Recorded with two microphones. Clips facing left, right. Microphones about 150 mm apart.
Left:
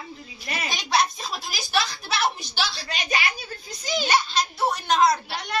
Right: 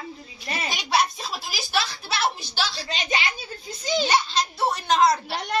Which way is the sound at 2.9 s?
20° right (ahead or behind).